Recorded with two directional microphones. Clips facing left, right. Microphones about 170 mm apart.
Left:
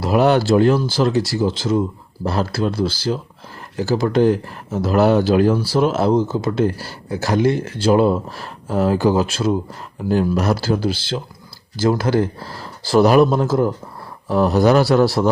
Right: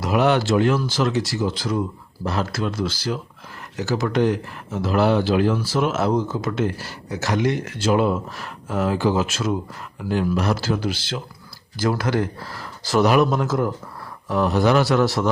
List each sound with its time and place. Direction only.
0.0 s speech: 35° left (ahead or behind)